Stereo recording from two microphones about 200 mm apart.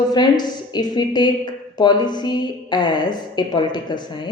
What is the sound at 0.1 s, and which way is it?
A woman's voice, 20° left (ahead or behind).